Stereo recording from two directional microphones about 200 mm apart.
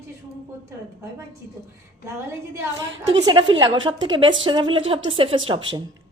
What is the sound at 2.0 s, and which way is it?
A woman's voice, 15° right (ahead or behind).